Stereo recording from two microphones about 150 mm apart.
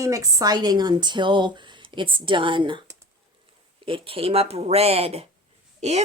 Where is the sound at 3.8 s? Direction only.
35° right (ahead or behind).